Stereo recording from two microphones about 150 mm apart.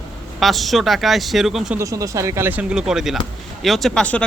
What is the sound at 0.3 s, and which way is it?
Speech, centre (ahead or behind).